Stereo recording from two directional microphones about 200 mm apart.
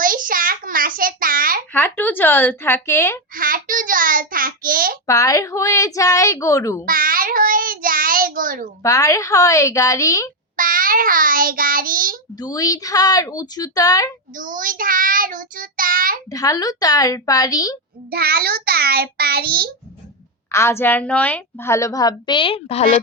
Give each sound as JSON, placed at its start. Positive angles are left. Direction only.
{"t": 0.0, "sound": "a sound", "side_deg": -45}
{"t": 1.7, "sound": "a woman's voice", "side_deg": 10}
{"t": 3.3, "sound": "a child's voice", "side_deg": -45}
{"t": 5.0, "sound": "a woman's voice", "side_deg": 15}
{"t": 6.8, "sound": "child singing", "side_deg": -45}
{"t": 8.8, "sound": "a woman's voice", "side_deg": 15}
{"t": 10.6, "sound": "child singing", "side_deg": -45}
{"t": 12.4, "sound": "a woman's voice", "side_deg": 20}
{"t": 14.3, "sound": "child singing", "side_deg": -40}
{"t": 16.3, "sound": "a woman's voice", "side_deg": 15}
{"t": 18.1, "sound": "child singing", "side_deg": -50}
{"t": 20.5, "sound": "a woman's voice", "side_deg": 15}